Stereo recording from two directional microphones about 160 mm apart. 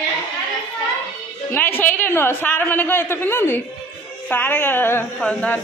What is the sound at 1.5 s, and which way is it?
A woman's voice, 15° left (ahead or behind).